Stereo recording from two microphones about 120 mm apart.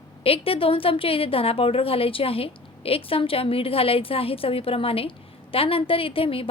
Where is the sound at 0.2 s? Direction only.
50° left (ahead or behind).